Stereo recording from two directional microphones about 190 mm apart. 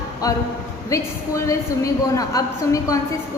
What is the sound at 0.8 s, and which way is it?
A woman's voice, 15° left (ahead or behind).